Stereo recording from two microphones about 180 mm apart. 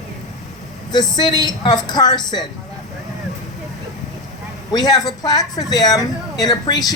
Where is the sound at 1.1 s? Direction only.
25° left (ahead or behind).